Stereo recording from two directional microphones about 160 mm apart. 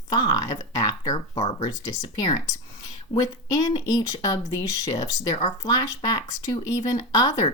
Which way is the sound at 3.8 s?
20° left (ahead or behind).